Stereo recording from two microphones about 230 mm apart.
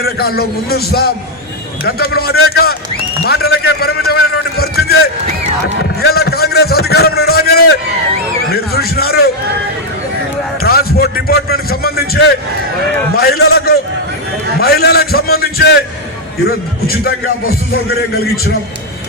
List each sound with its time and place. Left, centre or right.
0.0 s a man's voice: left
6.1 s a sound: left
8.5 s a man's voice: left
10.6 s a man's voice: left